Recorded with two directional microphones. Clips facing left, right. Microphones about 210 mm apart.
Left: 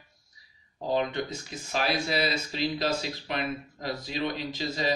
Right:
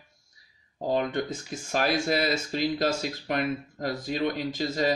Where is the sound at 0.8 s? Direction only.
50° right (ahead or behind).